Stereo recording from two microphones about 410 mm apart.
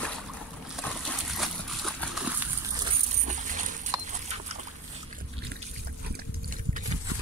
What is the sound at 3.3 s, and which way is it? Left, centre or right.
Dog, centre.